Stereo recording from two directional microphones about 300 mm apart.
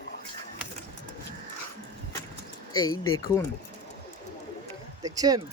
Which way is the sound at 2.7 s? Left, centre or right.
Centre.